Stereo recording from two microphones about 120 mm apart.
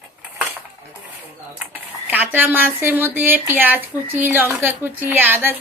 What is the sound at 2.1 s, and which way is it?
A woman's voice, 15° right (ahead or behind).